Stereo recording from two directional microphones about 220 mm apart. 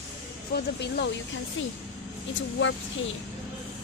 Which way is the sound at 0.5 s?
50° left (ahead or behind).